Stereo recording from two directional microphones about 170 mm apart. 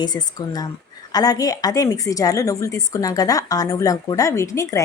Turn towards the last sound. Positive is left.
turn(degrees=20)  # may be behind; listen again after turning